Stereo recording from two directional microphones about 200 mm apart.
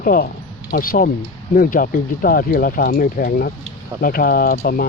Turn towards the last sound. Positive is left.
turn(degrees=50)  # may be behind; listen again after turning